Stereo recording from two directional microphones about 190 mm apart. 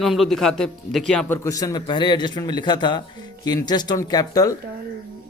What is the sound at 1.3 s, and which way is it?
A man's voice, 20° left (ahead or behind).